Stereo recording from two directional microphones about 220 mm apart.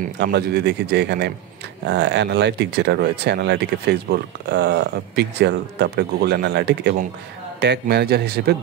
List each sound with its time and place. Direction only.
0.0 s speech: 50° right (ahead or behind)